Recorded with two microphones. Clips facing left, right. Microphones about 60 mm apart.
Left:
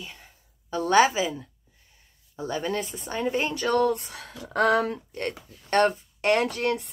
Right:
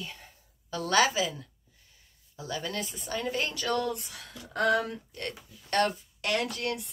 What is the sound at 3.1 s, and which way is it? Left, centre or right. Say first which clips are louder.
Speech: left 5 dB; left.